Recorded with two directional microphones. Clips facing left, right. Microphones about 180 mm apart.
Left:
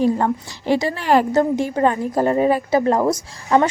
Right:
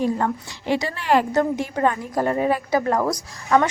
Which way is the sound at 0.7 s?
35° left (ahead or behind).